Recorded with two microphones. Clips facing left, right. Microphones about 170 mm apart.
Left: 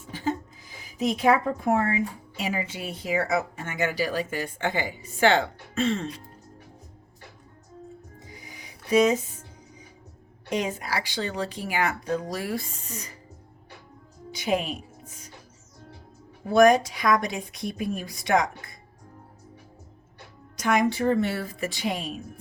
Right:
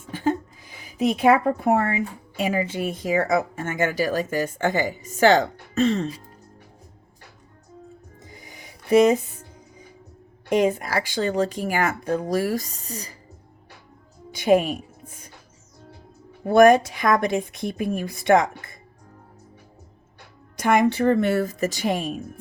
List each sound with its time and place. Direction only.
0.1 s a woman's voice: 60° right (ahead or behind); by 6.1 s 40° right (ahead or behind)
8.2 s music: 50° right (ahead or behind)
10.5 s speech: 55° right (ahead or behind); by 13.1 s 35° right (ahead or behind)
14.3 s a woman's voice: 50° right (ahead or behind)
16.4 s speech: 55° right (ahead or behind)
20.6 s speech: 55° right (ahead or behind)